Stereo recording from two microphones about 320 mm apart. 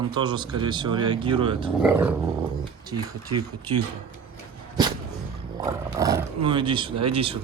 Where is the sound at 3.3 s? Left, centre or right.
Right.